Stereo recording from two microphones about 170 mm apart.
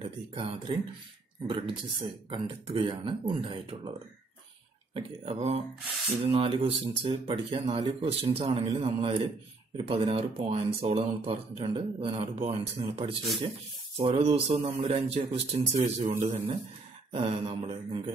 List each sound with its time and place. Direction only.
0.0 s speech: 30° right (ahead or behind)
4.9 s speech: 35° right (ahead or behind)